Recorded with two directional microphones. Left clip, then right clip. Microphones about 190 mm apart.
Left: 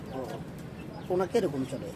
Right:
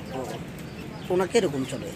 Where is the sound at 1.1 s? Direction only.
Centre (ahead or behind).